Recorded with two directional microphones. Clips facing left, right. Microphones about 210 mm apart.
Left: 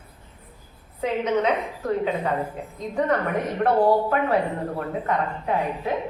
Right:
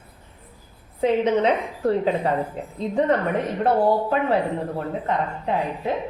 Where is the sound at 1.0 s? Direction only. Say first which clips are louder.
Right 4 dB; 30° right (ahead or behind).